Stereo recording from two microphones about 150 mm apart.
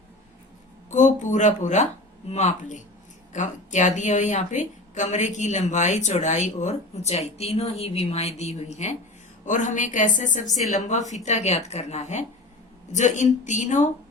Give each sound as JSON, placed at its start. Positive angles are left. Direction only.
{"t": 0.9, "sound": "speech", "side_deg": 55}
{"t": 10.4, "sound": "speech", "side_deg": 0}
{"t": 10.8, "sound": "speech", "side_deg": 50}